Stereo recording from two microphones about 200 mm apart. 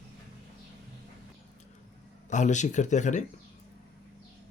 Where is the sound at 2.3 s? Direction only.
35° left (ahead or behind).